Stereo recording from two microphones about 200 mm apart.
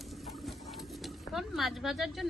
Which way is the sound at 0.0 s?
Centre (ahead or behind).